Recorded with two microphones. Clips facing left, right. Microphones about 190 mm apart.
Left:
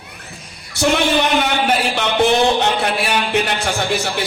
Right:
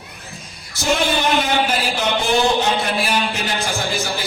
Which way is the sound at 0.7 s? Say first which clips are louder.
Left 4 dB; 65° left (ahead or behind).